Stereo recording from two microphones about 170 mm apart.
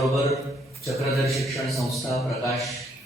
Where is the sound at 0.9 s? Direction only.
Centre (ahead or behind).